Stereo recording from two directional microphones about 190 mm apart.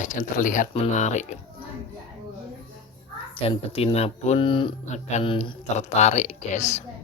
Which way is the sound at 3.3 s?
30° left (ahead or behind).